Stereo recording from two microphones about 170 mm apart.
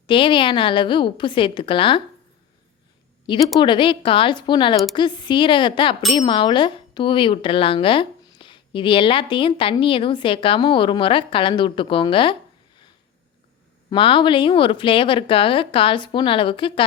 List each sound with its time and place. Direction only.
0.1 s speech: 30° left (ahead or behind)
3.3 s speech: 30° left (ahead or behind)
13.9 s speech: 30° left (ahead or behind)